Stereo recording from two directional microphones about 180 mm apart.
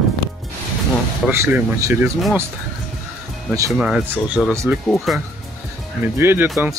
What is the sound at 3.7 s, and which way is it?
Speech, 5° right (ahead or behind).